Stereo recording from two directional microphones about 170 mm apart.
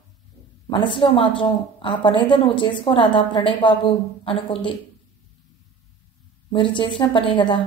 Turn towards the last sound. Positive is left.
turn(degrees=30)  # may be behind; listen again after turning